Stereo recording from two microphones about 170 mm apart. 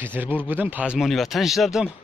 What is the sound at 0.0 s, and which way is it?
Speech, 10° right (ahead or behind).